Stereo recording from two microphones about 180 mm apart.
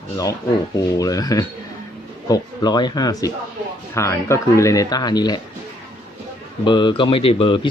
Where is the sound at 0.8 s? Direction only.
20° left (ahead or behind).